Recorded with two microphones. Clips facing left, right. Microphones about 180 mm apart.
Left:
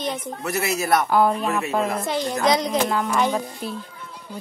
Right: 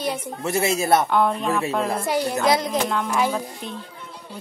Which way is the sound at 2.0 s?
10° right (ahead or behind).